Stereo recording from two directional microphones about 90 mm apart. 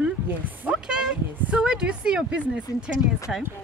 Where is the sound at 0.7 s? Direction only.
10° right (ahead or behind).